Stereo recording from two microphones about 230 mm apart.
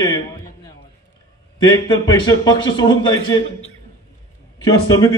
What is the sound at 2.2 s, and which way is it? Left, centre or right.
Speech, centre.